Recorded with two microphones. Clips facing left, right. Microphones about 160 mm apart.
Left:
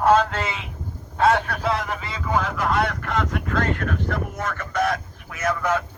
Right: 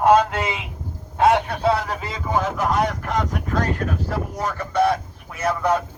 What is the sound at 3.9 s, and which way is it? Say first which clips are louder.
Speech: right 1 dB; 35° right (ahead or behind).